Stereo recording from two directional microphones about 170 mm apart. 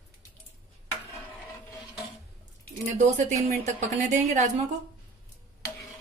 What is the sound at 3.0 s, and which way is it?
A woman's voice, 45° right (ahead or behind).